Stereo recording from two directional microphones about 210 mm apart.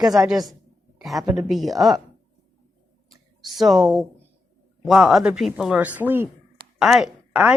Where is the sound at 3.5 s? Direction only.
Centre (ahead or behind).